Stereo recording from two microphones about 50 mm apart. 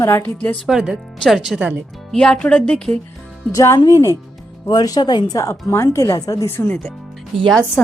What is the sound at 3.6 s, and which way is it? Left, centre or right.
Speech, left.